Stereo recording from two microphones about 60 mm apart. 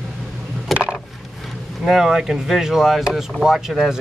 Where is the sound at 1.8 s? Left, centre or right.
Centre.